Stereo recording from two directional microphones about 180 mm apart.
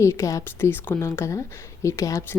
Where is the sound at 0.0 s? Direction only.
15° left (ahead or behind).